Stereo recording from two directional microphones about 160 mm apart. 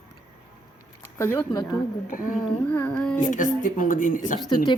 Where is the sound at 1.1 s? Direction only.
20° left (ahead or behind).